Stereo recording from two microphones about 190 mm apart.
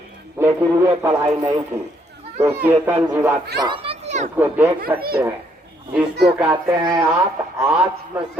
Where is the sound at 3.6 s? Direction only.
25° right (ahead or behind).